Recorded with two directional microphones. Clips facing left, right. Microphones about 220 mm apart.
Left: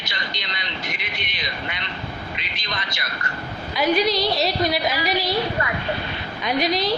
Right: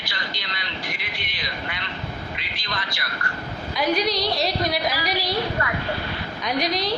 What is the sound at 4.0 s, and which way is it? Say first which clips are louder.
Speech: left 3 dB; centre (ahead or behind).